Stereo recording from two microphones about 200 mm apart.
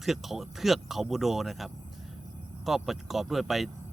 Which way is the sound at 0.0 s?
Centre (ahead or behind).